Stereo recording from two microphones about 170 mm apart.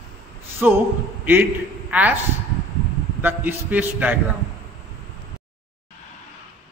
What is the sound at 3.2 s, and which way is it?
Speech, 10° right (ahead or behind).